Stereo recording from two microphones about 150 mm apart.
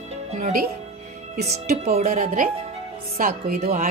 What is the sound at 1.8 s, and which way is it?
Speech, 55° right (ahead or behind).